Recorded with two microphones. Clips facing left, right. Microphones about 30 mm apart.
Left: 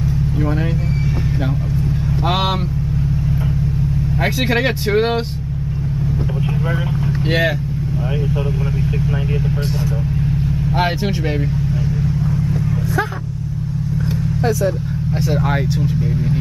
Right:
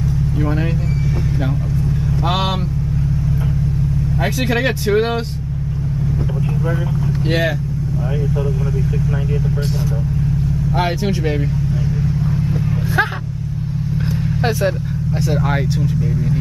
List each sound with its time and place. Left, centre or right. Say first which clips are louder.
4.2 s speech: left 1 dB; centre
7.2 s speech: left 1 dB; centre
15.2 s speech: even; centre
15.8 s speech: even; centre